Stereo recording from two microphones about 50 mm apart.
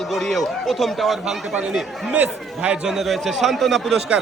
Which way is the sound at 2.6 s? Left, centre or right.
Right.